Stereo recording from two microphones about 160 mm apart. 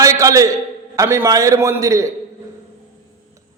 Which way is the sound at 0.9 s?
15° right (ahead or behind).